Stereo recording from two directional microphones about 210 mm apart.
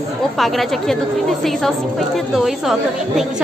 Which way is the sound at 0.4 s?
Centre (ahead or behind).